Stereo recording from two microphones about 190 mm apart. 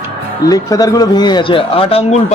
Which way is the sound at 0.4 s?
20° left (ahead or behind).